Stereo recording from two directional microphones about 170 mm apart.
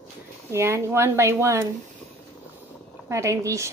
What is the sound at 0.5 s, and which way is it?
A woman's voice, 15° right (ahead or behind).